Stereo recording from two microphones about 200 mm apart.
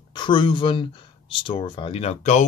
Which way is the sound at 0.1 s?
25° left (ahead or behind).